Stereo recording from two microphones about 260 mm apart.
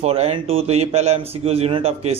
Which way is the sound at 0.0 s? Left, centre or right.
Right.